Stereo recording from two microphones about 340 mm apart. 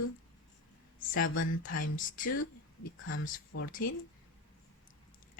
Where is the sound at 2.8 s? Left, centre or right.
Left.